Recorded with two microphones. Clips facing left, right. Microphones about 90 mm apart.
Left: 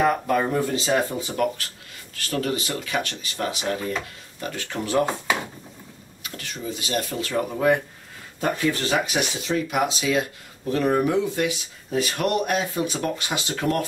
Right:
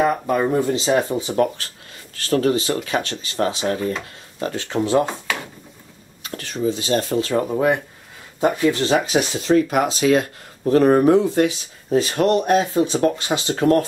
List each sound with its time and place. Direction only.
0.0 s speech: 25° right (ahead or behind)
5.0 s speech: 15° left (ahead or behind)
6.2 s speech: 35° right (ahead or behind)